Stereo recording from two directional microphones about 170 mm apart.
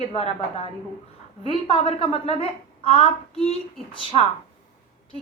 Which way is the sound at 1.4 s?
35° left (ahead or behind).